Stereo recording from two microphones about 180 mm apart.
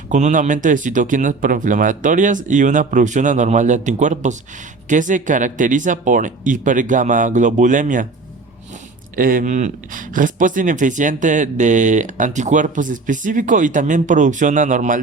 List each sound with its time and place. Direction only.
0.1 s speech: 45° right (ahead or behind)
9.1 s speech: 50° right (ahead or behind)